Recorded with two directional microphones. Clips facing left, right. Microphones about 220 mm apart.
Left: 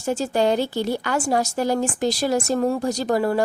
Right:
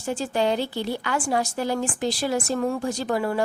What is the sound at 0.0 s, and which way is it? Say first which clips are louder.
A woman's voice: left 3 dB; 40° left (ahead or behind).